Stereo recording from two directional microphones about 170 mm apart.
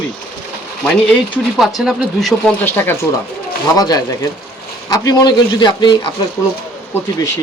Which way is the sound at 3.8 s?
20° left (ahead or behind).